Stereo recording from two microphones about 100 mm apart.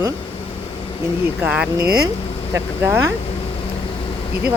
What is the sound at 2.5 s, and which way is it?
Speech, 25° right (ahead or behind).